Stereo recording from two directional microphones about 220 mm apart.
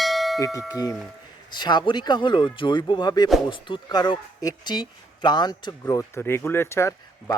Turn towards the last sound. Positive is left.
turn(degrees=15)  # may be behind; listen again after turning